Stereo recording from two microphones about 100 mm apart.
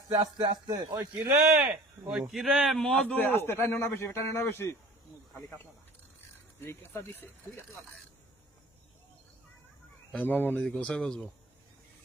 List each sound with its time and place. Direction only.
0.2 s speech: 40° right (ahead or behind)
0.9 s a man's voice: 30° right (ahead or behind)
1.6 s a man's voice: 5° right (ahead or behind)
3.2 s a man's voice: 20° left (ahead or behind)
6.6 s a man's voice: 25° left (ahead or behind)
10.1 s speech: 15° left (ahead or behind)